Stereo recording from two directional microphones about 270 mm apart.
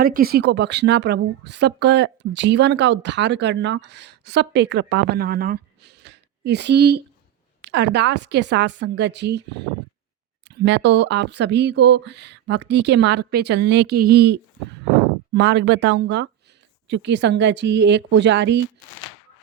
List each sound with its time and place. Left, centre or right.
0.0 s a woman's voice: right